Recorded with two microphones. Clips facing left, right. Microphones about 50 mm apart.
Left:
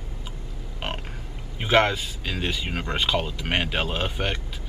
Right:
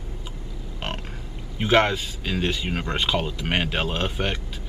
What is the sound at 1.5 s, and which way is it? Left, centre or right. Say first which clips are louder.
Speech: right 1 dB; centre.